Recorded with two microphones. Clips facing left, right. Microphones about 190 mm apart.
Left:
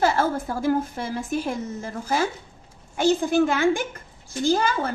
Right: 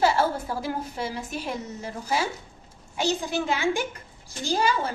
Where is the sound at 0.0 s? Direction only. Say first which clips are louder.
Left 1 dB; 50° left (ahead or behind).